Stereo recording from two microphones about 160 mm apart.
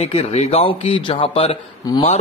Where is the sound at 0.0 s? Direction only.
40° left (ahead or behind).